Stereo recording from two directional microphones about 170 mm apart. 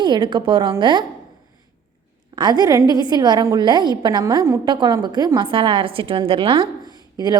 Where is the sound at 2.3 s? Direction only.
25° right (ahead or behind).